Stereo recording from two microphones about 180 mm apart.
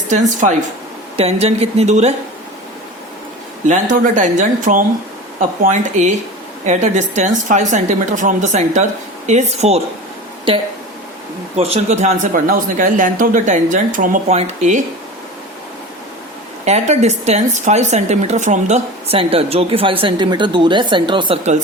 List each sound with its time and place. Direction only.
0.1 s a man's voice: 45° right (ahead or behind)
3.7 s a man's voice: 45° right (ahead or behind)
16.6 s speech: 40° right (ahead or behind)